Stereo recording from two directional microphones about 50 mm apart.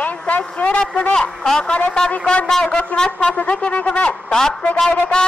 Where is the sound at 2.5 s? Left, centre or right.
Centre.